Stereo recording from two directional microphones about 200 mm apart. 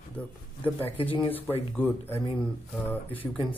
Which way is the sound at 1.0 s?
25° left (ahead or behind).